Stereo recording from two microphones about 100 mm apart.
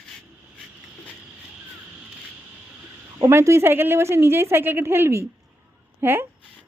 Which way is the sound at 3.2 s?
30° right (ahead or behind).